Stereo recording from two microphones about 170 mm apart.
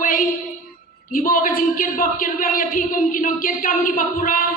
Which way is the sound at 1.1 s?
55° left (ahead or behind).